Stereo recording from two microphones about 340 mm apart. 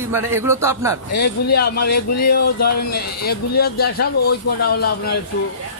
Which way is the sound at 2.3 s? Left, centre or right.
Left.